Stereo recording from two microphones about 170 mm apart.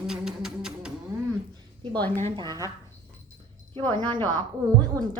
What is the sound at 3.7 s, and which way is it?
Speech, 30° right (ahead or behind).